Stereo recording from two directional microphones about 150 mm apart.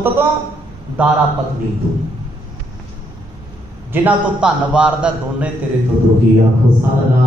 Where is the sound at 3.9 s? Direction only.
10° right (ahead or behind).